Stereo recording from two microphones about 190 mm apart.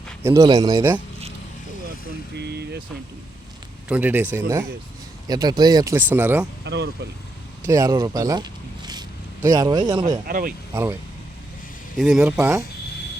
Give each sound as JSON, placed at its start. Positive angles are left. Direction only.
{"t": 0.2, "sound": "speech", "side_deg": -15}
{"t": 2.3, "sound": "speech", "side_deg": -60}
{"t": 3.8, "sound": "speech", "side_deg": -10}
{"t": 6.7, "sound": "speech", "side_deg": -65}
{"t": 7.7, "sound": "speech", "side_deg": -20}
{"t": 10.2, "sound": "speech", "side_deg": -50}
{"t": 11.9, "sound": "speech", "side_deg": 0}